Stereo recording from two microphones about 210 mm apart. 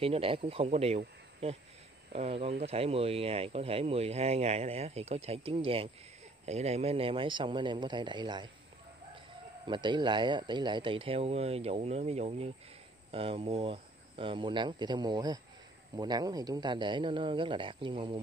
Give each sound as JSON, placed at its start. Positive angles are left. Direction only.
{"t": 0.0, "sound": "speech", "side_deg": -25}
{"t": 9.7, "sound": "speech", "side_deg": -20}